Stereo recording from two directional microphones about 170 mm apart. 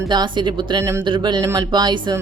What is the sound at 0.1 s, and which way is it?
Speech, 25° right (ahead or behind).